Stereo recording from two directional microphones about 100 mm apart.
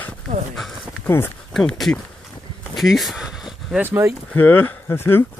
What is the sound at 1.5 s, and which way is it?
Speech, 5° left (ahead or behind).